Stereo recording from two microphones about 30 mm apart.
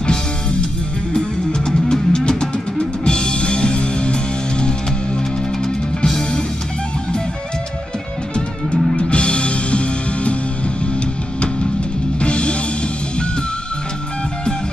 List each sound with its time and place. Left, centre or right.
1.1 s music: left
5.6 s music: centre
8.9 s music: left
12.2 s music: left